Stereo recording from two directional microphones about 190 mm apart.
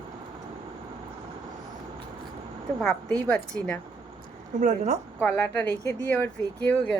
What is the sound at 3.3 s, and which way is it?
Speech, 5° left (ahead or behind).